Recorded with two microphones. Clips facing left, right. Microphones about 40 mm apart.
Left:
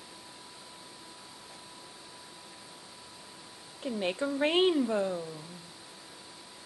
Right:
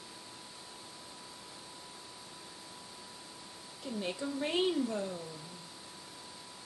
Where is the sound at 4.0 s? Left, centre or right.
Left.